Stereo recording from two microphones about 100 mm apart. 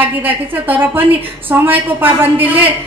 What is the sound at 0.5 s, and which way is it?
A woman's voice, 20° right (ahead or behind).